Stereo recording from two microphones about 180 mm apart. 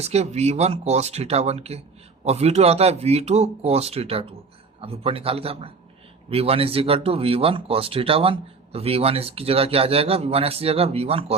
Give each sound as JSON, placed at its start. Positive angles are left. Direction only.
{"t": 0.0, "sound": "speech", "side_deg": -35}